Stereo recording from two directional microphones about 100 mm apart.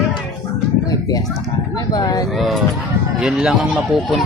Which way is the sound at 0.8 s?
40° left (ahead or behind).